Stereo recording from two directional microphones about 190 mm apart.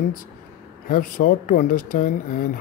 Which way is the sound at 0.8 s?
45° left (ahead or behind).